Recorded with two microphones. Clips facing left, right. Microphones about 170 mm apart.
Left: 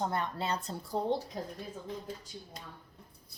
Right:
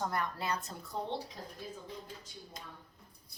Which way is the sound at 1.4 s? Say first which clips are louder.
Left 8 dB; 45° left (ahead or behind).